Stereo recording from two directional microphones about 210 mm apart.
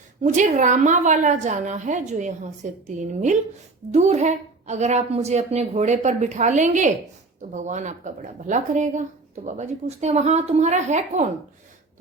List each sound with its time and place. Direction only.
0.2 s speech: 35° right (ahead or behind)